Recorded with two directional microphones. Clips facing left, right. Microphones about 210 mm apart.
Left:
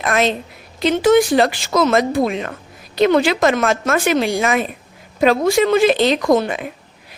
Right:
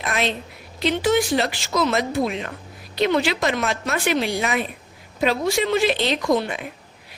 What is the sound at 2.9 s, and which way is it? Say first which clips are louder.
A woman's voice: left 6 dB; 50° left (ahead or behind).